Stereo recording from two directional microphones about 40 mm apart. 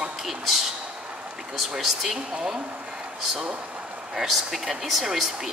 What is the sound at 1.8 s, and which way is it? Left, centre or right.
Speech, centre.